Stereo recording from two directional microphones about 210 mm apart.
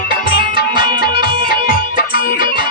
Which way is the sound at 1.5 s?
45° left (ahead or behind).